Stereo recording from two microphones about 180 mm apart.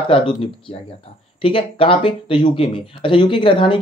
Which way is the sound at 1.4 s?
30° left (ahead or behind).